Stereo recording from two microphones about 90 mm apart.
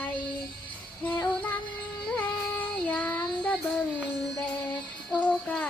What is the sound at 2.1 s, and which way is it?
Child singing, 20° left (ahead or behind).